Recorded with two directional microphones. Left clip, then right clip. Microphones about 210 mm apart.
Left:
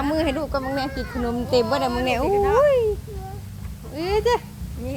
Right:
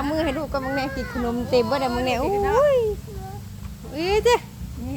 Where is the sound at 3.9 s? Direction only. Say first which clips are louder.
Right 2 dB; 20° right (ahead or behind).